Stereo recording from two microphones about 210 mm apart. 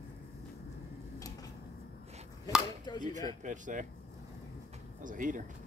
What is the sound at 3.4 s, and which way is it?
Speech, 35° right (ahead or behind).